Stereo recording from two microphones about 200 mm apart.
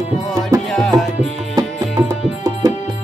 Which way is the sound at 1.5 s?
20° right (ahead or behind).